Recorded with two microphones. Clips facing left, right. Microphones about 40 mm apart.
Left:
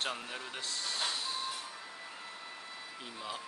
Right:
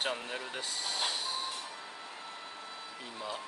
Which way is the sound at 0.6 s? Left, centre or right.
Centre.